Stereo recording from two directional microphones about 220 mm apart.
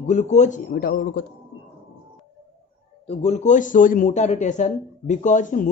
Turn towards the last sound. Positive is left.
turn(degrees=35)  # may be behind; listen again after turning